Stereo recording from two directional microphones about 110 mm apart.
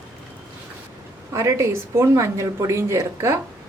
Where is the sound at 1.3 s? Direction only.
25° right (ahead or behind).